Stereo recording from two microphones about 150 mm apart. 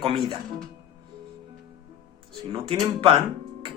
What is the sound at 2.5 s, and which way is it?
Speech, 35° right (ahead or behind).